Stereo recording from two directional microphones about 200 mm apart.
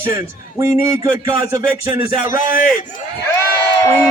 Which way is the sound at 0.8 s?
15° right (ahead or behind).